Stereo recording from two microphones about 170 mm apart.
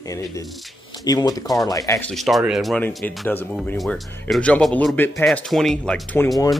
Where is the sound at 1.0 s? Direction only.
20° left (ahead or behind).